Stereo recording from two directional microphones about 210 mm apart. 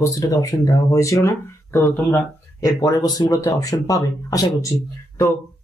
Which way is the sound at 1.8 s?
5° left (ahead or behind).